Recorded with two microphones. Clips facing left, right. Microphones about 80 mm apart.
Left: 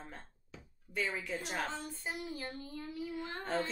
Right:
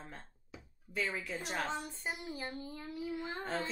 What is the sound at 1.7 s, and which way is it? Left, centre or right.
Speech, centre.